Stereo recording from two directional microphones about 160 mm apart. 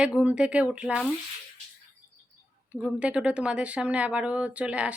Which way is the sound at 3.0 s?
5° right (ahead or behind).